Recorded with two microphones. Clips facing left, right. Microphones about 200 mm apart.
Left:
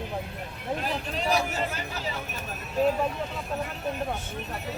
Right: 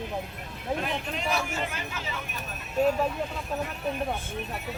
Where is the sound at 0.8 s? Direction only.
35° left (ahead or behind).